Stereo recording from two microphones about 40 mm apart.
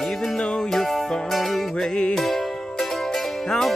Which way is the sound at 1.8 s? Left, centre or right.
Left.